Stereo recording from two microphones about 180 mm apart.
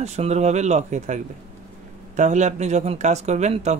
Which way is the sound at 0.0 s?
40° right (ahead or behind).